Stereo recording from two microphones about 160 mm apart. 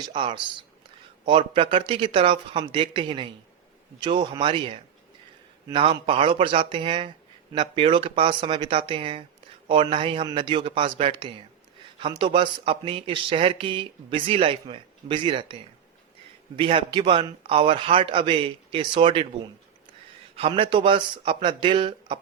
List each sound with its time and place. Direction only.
0.1 s speech: 30° right (ahead or behind)
16.6 s a man's voice: 35° right (ahead or behind)